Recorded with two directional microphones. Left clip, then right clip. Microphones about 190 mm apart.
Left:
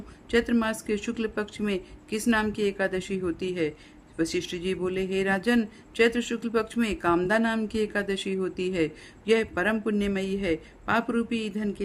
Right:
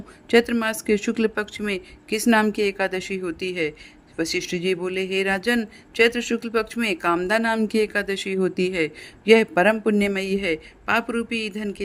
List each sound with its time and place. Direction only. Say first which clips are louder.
0.3 s a woman's voice: right 6 dB; 35° right (ahead or behind)